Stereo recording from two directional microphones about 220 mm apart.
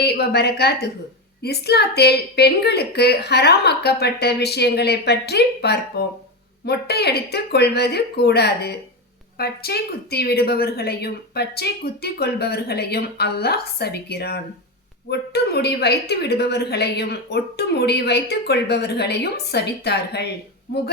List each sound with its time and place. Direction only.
0.0 s a woman's voice: 45° left (ahead or behind)